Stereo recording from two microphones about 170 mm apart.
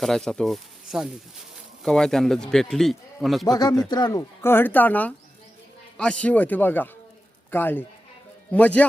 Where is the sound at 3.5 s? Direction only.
25° left (ahead or behind).